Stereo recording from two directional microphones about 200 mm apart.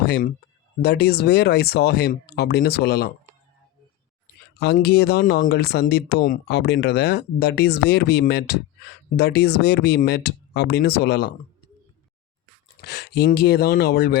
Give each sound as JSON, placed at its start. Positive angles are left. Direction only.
{"t": 0.0, "sound": "speech", "side_deg": 50}
{"t": 4.6, "sound": "speech", "side_deg": 55}
{"t": 12.8, "sound": "speech", "side_deg": 55}